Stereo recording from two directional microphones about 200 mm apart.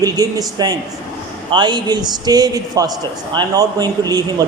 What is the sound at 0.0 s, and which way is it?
A man's voice, 20° right (ahead or behind).